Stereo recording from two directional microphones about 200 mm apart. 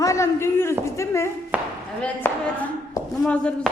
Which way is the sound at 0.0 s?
15° left (ahead or behind).